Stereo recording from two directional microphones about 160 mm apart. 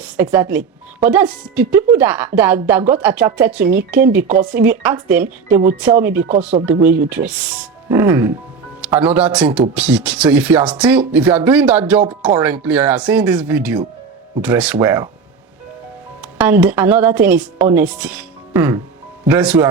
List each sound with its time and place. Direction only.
0.0 s speech: 10° right (ahead or behind)
5.5 s speech: 60° right (ahead or behind)
6.0 s speech: 10° right (ahead or behind)
16.4 s speech: 10° right (ahead or behind)